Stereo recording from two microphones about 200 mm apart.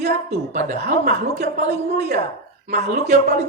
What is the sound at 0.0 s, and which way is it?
Speech, 35° right (ahead or behind).